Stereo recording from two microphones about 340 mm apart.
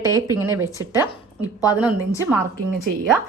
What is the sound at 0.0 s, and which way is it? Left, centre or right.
Speech, centre.